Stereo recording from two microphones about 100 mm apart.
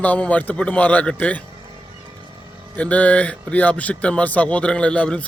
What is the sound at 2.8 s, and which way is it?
Speech, 15° left (ahead or behind).